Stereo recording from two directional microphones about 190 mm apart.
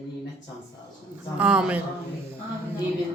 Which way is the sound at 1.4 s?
5° right (ahead or behind).